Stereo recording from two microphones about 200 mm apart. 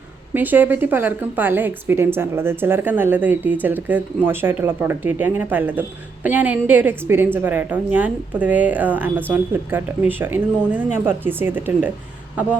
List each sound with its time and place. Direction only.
0.3 s a woman's voice: 10° right (ahead or behind)